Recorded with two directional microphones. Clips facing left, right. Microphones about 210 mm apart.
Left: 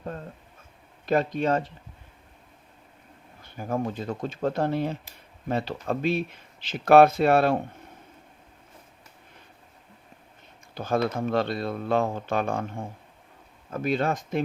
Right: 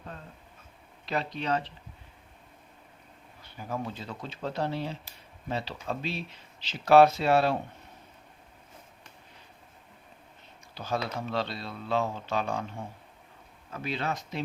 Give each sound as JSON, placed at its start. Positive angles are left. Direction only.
{"t": 1.0, "sound": "speech", "side_deg": 50}
{"t": 3.4, "sound": "speech", "side_deg": 50}
{"t": 10.8, "sound": "speech", "side_deg": 50}